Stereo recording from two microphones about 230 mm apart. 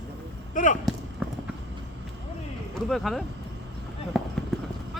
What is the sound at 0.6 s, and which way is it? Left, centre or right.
Speech, left.